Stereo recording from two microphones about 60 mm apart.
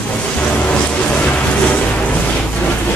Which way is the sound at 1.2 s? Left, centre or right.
Left.